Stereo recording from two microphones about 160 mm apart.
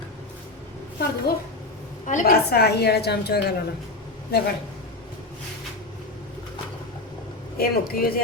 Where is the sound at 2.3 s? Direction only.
85° left.